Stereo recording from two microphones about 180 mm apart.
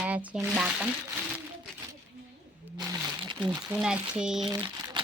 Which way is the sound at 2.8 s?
20° right (ahead or behind).